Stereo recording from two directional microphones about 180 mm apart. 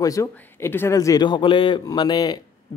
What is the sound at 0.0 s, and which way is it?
A man's voice, 15° left (ahead or behind).